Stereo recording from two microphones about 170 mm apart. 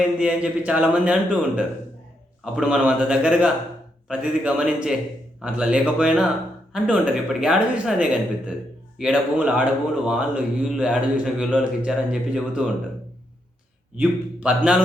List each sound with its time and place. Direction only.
0.0 s speech: 5° right (ahead or behind)
13.9 s speech: 10° right (ahead or behind)